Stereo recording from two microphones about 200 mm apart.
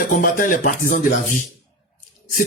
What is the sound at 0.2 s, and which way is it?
Speech, 45° left (ahead or behind).